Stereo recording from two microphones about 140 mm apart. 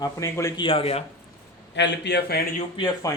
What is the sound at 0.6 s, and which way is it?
Speech, 40° left (ahead or behind).